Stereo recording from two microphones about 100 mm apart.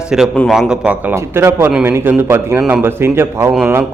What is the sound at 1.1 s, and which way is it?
A man's voice, 25° right (ahead or behind).